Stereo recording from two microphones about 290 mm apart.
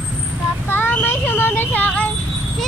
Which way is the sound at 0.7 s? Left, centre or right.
Centre.